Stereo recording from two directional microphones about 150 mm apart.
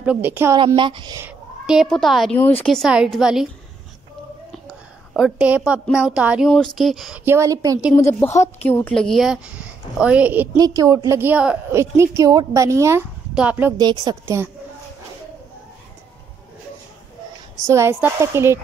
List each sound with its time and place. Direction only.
0.0 s speech: 10° right (ahead or behind)
0.7 s speech: 30° right (ahead or behind)
1.7 s a woman's voice: centre (ahead or behind)
4.6 s a sound: 5° right (ahead or behind)
5.6 s a woman's voice: 5° right (ahead or behind)
7.2 s a woman's voice: 20° right (ahead or behind)
7.9 s a woman's voice: 15° left (ahead or behind); by 10.6 s 10° right (ahead or behind)
10.6 s a woman's voice: 25° right (ahead or behind)
13.3 s speech: 10° right (ahead or behind)
13.7 s a woman's voice: 25° right (ahead or behind)
17.6 s speech: 15° right (ahead or behind)